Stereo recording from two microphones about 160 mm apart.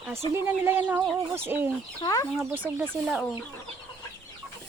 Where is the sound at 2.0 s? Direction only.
25° left (ahead or behind).